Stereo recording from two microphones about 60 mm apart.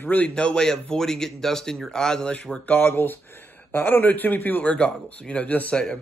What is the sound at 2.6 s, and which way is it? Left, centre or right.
Speech, left.